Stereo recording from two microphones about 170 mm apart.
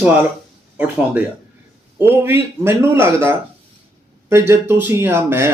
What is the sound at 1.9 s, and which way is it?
Speech, 15° right (ahead or behind).